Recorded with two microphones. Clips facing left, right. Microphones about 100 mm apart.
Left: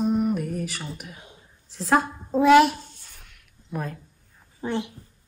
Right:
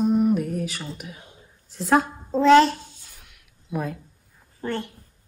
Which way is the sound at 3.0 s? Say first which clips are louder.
Even; 5° right (ahead or behind).